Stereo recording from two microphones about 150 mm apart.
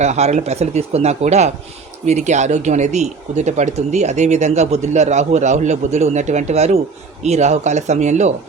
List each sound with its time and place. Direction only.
0.0 s speech: 50° right (ahead or behind)